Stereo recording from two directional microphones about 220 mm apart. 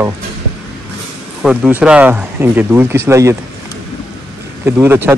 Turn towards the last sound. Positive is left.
turn(degrees=-10)  # may be behind; listen again after turning